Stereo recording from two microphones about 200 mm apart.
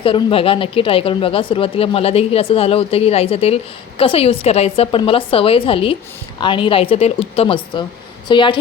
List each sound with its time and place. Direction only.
0.0 s a woman's voice: 25° left (ahead or behind)